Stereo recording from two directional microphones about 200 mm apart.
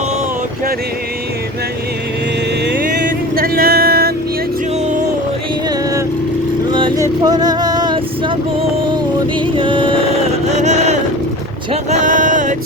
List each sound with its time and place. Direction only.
2.6 s music: 50° right (ahead or behind)
6.7 s vehicle: 25° right (ahead or behind)
9.6 s music: 25° right (ahead or behind)
10.4 s music: 35° right (ahead or behind)
11.7 s a sound: 35° right (ahead or behind)